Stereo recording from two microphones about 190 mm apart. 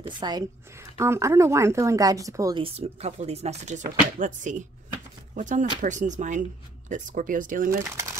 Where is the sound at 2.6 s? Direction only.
30° right (ahead or behind).